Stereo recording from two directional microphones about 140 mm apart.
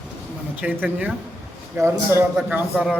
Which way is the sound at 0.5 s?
15° right (ahead or behind).